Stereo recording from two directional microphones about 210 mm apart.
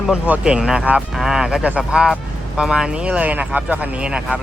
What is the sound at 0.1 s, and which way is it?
Speech, 5° right (ahead or behind).